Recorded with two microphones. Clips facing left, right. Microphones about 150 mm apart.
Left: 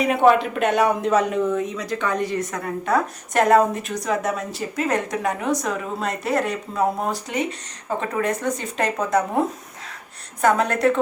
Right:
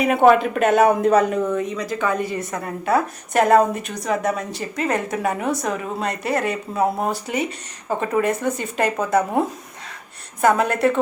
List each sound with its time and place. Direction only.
0.0 s a woman's voice: centre (ahead or behind)
0.8 s a man's voice: 45° right (ahead or behind)
1.1 s a woman's voice: centre (ahead or behind)
10.4 s a woman's voice: 5° right (ahead or behind)